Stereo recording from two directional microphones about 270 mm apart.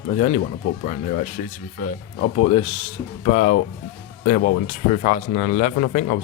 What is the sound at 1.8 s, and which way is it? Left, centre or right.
Speech, left.